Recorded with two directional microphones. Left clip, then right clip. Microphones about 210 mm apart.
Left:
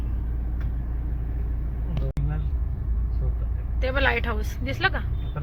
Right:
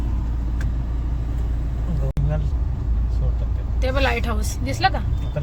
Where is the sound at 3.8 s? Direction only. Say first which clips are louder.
Right 1 dB; 10° right (ahead or behind).